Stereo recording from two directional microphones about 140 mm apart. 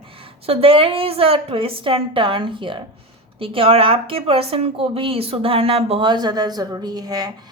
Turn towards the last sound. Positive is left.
turn(degrees=-30)  # may be behind; listen again after turning